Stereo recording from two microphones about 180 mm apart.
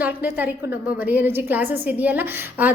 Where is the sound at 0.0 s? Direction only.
10° right (ahead or behind).